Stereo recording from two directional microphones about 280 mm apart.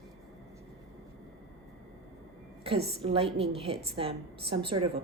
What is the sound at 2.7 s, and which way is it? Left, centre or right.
A woman's voice, centre.